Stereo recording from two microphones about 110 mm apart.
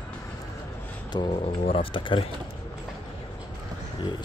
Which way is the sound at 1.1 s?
40° left (ahead or behind).